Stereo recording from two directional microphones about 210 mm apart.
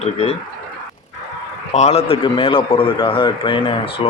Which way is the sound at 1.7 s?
30° left (ahead or behind).